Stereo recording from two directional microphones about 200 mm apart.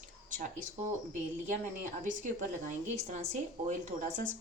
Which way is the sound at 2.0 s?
40° right (ahead or behind).